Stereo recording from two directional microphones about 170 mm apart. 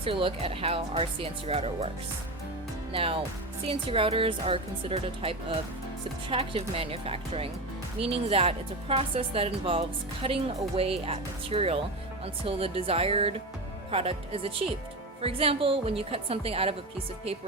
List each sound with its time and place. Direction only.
0.0 s speech: 30° right (ahead or behind)
2.9 s speech: 35° right (ahead or behind)